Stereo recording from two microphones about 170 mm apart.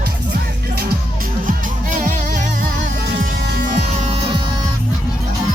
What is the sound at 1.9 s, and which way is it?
Music, 50° right (ahead or behind).